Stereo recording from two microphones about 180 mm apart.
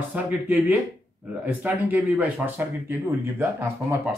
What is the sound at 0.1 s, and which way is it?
Speech, 10° right (ahead or behind).